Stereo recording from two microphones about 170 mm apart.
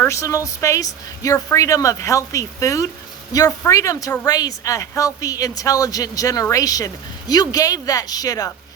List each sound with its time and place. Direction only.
0.0 s speech: 20° left (ahead or behind)